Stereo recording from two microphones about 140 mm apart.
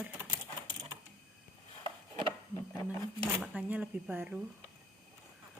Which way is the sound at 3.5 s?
10° right (ahead or behind).